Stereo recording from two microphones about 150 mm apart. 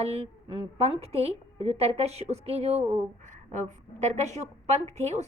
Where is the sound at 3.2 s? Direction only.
55° right (ahead or behind).